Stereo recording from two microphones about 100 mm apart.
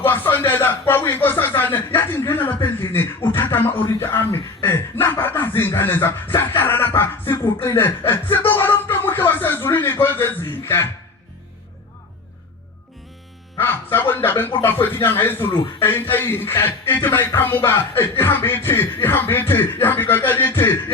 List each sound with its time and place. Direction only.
0.0 s speech: 20° left (ahead or behind)
2.6 s music: 25° left (ahead or behind)
4.6 s speech: 25° left (ahead or behind)
13.6 s music: 20° left (ahead or behind)